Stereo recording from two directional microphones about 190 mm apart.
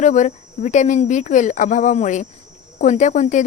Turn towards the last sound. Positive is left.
turn(degrees=40)  # may be behind; listen again after turning